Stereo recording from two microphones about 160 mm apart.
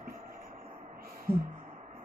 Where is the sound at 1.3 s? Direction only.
30° left (ahead or behind).